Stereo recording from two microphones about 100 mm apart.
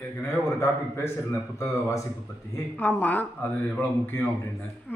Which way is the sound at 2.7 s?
15° left (ahead or behind).